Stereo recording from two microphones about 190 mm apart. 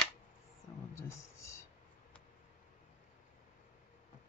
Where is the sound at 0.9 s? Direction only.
15° left (ahead or behind).